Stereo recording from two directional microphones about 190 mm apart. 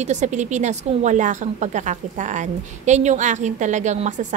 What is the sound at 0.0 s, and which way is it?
A woman's voice, 40° right (ahead or behind).